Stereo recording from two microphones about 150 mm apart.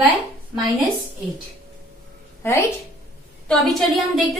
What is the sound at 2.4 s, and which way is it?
Speech, 15° left (ahead or behind).